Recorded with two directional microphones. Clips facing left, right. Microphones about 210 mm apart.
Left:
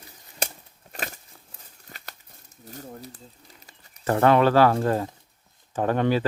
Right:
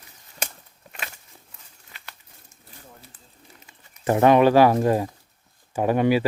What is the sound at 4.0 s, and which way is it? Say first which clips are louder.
Speech: right 3 dB; 15° right (ahead or behind).